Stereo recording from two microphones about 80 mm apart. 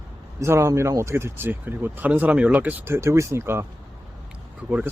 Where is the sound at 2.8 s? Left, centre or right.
Right.